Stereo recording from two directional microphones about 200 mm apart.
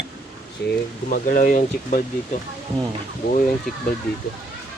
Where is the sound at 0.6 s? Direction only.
60° left (ahead or behind).